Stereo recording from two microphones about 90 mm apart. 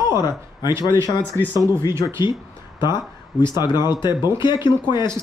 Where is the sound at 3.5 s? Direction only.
50° left (ahead or behind).